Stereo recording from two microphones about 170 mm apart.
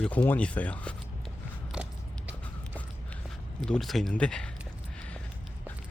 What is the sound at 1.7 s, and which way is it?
Biting, 5° right (ahead or behind).